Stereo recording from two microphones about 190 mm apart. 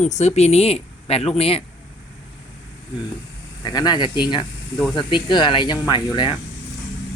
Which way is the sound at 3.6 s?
20° left (ahead or behind).